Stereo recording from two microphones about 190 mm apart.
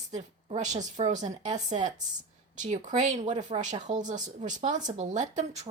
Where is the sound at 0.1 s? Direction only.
40° right (ahead or behind).